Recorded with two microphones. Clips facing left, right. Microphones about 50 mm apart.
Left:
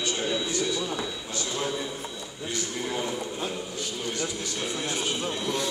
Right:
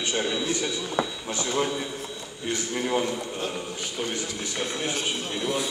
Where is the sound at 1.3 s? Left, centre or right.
Right.